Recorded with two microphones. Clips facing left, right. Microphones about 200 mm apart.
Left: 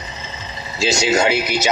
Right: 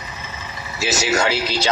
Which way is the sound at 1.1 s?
20° left (ahead or behind).